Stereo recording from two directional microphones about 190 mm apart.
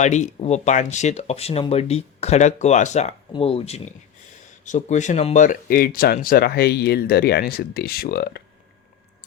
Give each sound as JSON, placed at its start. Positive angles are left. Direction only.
{"t": 0.0, "sound": "speech", "side_deg": 40}